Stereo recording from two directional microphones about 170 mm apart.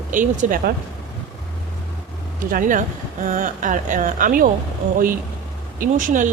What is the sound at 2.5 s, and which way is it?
Speech, 50° right (ahead or behind).